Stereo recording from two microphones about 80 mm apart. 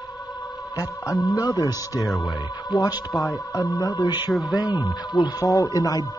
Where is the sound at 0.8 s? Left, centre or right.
Left.